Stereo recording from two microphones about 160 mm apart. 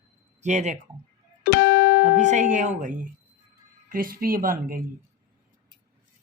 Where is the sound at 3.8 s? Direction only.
60° right (ahead or behind).